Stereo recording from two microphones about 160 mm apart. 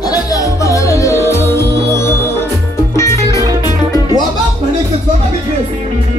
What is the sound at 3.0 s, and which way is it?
Music, 20° left (ahead or behind).